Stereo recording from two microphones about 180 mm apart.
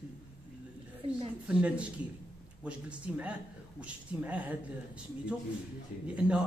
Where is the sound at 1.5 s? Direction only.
5° right (ahead or behind).